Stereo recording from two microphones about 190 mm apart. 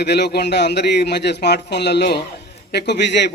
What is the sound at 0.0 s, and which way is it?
A man's voice, 60° left (ahead or behind).